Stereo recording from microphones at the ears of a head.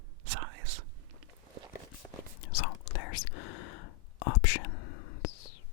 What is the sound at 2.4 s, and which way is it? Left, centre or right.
Whispering, left.